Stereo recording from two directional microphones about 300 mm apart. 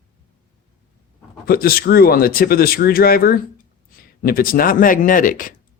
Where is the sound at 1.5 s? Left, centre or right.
Left.